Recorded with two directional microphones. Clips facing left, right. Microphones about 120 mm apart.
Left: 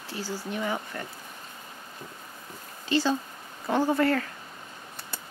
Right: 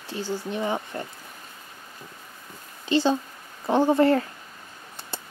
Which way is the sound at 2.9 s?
20° right (ahead or behind).